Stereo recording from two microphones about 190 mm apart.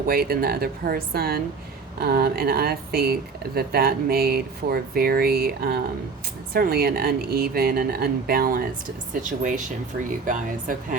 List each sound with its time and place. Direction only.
0.1 s speech: 55° right (ahead or behind)